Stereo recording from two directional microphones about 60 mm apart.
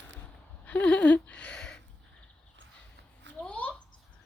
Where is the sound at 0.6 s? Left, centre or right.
Left.